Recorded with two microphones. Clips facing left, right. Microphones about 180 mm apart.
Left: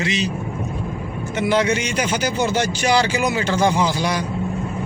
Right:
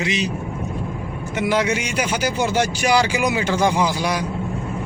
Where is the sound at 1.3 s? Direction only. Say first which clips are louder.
Left 1 dB; 10° right (ahead or behind).